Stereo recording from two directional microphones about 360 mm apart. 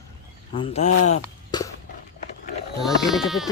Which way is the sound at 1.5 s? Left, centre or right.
Centre.